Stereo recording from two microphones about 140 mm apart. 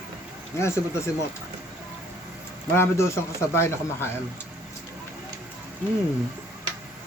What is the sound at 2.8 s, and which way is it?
A man's voice, 20° left (ahead or behind).